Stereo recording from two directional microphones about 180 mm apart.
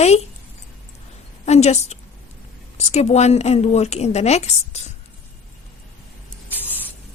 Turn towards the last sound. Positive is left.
turn(degrees=10)  # may be behind; listen again after turning